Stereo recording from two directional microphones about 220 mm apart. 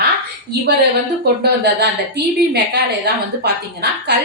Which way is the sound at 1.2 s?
45° right (ahead or behind).